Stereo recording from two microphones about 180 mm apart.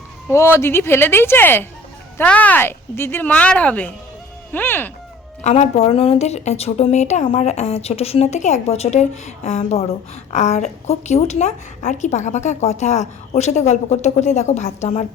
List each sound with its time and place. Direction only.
0.3 s speech: 15° left (ahead or behind)
5.4 s a woman's voice: 40° left (ahead or behind)